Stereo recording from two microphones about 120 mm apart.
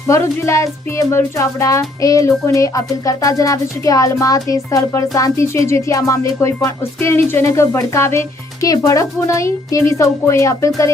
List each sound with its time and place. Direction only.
0.1 s speech: 25° left (ahead or behind)